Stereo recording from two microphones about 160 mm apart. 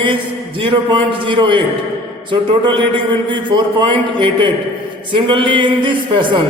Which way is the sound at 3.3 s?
30° right (ahead or behind).